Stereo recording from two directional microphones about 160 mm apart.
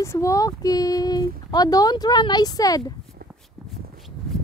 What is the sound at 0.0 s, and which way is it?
Speech, 20° left (ahead or behind).